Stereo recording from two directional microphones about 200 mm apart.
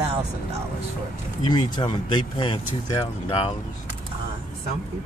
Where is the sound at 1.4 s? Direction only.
20° left (ahead or behind).